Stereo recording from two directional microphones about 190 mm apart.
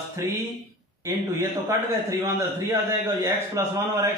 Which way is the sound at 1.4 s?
15° right (ahead or behind).